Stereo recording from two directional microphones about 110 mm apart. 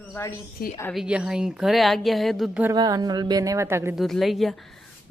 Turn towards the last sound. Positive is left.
turn(degrees=0)  # may be behind; listen again after turning